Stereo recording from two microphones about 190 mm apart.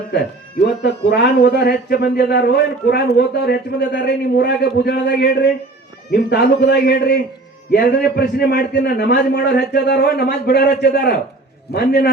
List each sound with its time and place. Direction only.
0.1 s speech: 60° left (ahead or behind)